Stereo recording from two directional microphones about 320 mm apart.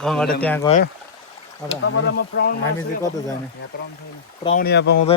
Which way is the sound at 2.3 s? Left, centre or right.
Left.